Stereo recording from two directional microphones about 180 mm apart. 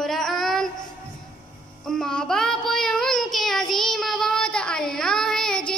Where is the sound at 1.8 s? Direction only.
5° left (ahead or behind).